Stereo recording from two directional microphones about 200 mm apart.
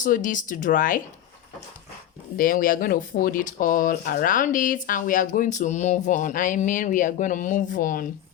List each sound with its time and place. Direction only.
0.0 s speech: 40° left (ahead or behind)
2.4 s speech: 45° left (ahead or behind)